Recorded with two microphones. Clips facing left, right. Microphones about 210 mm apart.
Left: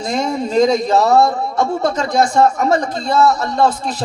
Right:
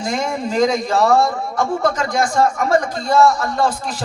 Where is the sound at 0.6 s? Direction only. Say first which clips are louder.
Left 2 dB; 25° left (ahead or behind).